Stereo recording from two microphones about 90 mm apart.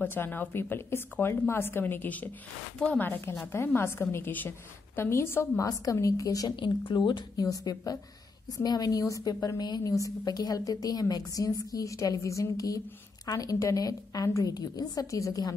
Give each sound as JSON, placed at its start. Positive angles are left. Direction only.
{"t": 0.0, "sound": "a woman's voice", "side_deg": 20}
{"t": 6.5, "sound": "speech", "side_deg": 60}
{"t": 7.4, "sound": "a woman's voice", "side_deg": 40}